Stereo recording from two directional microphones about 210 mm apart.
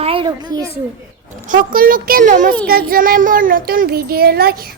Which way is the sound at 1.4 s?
40° right (ahead or behind).